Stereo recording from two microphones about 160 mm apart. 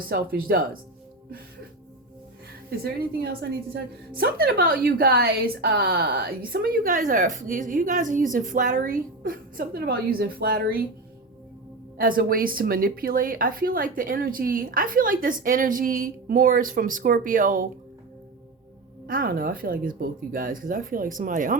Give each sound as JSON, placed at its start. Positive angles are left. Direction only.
{"t": 0.0, "sound": "speech", "side_deg": -65}
{"t": 2.6, "sound": "a woman's voice", "side_deg": -75}
{"t": 11.9, "sound": "speech", "side_deg": -65}
{"t": 19.0, "sound": "speech", "side_deg": -65}